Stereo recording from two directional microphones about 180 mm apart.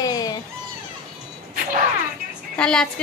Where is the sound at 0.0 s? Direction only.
20° left (ahead or behind).